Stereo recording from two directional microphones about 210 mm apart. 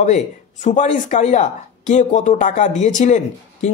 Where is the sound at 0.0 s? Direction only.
35° left (ahead or behind).